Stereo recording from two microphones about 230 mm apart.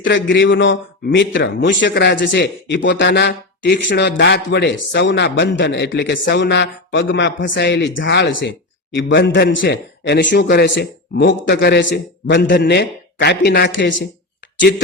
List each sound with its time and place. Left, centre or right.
0.0 s a man's voice: left